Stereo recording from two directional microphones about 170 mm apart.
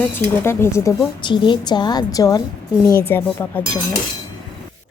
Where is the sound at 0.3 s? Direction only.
15° left (ahead or behind).